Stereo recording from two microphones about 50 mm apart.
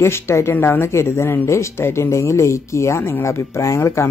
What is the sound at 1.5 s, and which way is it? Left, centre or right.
Speech, left.